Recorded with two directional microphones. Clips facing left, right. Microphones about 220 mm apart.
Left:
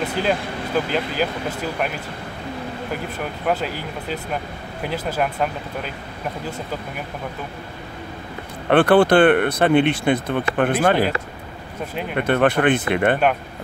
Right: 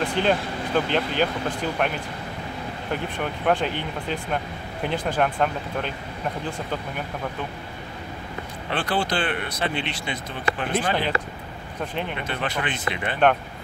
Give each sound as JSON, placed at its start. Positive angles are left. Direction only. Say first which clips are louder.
{"t": 0.0, "sound": "vehicle", "louder": "even", "side_deg": 5}
{"t": 0.8, "sound": "speech", "louder": "even", "side_deg": 5}
{"t": 3.6, "sound": "speech", "louder": "even", "side_deg": 5}
{"t": 8.6, "sound": "speech", "louder": "left 12 dB", "side_deg": 60}
{"t": 12.2, "sound": "speech", "louder": "left 11 dB", "side_deg": 55}